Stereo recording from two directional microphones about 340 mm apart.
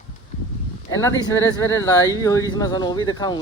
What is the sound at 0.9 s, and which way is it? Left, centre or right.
A child's voice, centre.